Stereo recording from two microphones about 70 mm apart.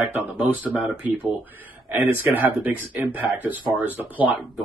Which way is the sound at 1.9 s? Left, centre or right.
Right.